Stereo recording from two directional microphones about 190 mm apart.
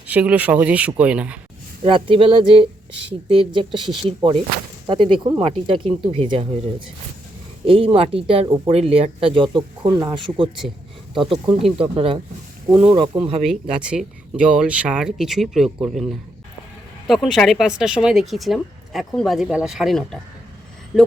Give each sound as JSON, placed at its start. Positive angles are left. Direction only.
{"t": 0.1, "sound": "speech", "side_deg": -5}
{"t": 1.8, "sound": "speech", "side_deg": -25}
{"t": 8.4, "sound": "speech", "side_deg": -15}
{"t": 8.7, "sound": "speech", "side_deg": -30}
{"t": 11.3, "sound": "speech", "side_deg": 0}
{"t": 11.8, "sound": "speech", "side_deg": -30}
{"t": 13.4, "sound": "speech", "side_deg": -5}